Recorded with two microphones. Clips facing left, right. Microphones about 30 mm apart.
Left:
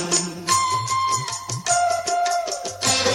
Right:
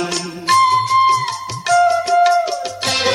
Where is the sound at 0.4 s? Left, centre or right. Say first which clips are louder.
Right 9 dB; right.